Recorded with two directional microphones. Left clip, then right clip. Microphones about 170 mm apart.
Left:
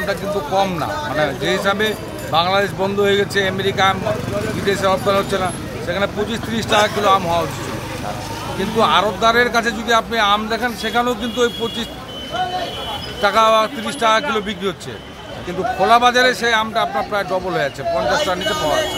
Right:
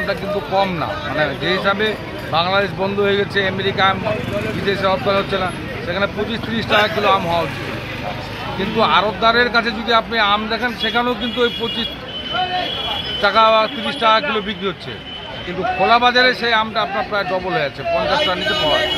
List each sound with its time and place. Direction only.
0.1 s speech: 10° left (ahead or behind)
8.5 s speech: 15° left (ahead or behind)
13.2 s speech: 15° left (ahead or behind)
15.8 s speech: 15° left (ahead or behind)